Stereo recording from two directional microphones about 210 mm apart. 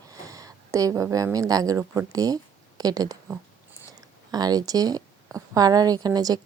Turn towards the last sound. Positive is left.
turn(degrees=-20)  # may be behind; listen again after turning